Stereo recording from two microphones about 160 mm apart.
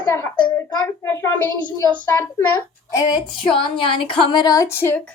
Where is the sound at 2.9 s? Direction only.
20° left (ahead or behind).